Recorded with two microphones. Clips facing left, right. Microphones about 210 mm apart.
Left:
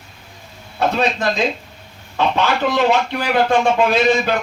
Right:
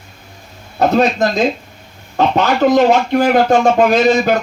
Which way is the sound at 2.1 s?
45° right (ahead or behind).